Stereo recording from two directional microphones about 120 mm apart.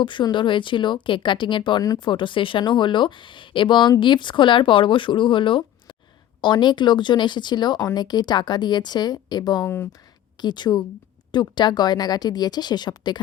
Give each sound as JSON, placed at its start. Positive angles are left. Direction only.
{"t": 0.0, "sound": "speech", "side_deg": 40}
{"t": 9.6, "sound": "speech", "side_deg": 20}
{"t": 10.4, "sound": "speech", "side_deg": 40}